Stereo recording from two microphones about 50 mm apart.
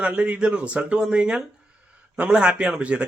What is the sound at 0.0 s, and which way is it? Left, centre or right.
Speech, right.